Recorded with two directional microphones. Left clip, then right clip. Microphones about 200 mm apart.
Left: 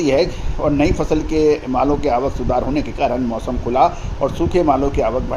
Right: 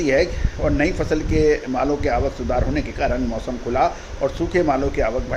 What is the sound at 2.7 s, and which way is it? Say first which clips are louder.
Speech: left 4 dB; 30° left (ahead or behind).